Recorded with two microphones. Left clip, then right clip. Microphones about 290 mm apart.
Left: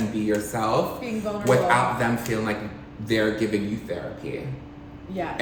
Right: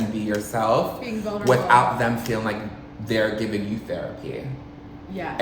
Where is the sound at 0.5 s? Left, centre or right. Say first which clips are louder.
Right 7 dB; centre.